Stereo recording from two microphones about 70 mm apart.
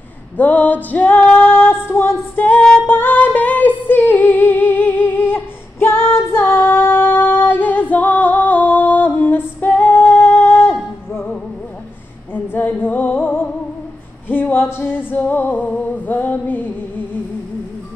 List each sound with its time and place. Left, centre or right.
0.4 s music: left
1.3 s female singing: left
12.4 s female singing: left
14.3 s singing: left